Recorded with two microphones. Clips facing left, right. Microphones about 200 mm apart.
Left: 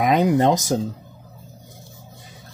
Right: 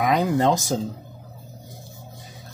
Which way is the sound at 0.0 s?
20° left (ahead or behind).